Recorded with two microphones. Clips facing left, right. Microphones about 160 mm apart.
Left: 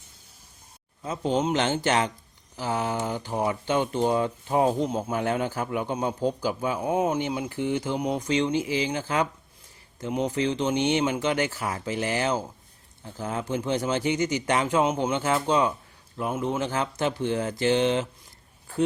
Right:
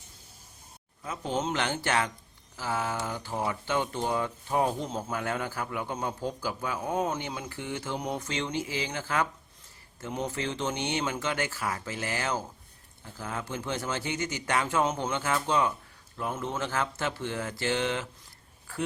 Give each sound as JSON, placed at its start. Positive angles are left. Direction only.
{"t": 1.0, "sound": "speech", "side_deg": 25}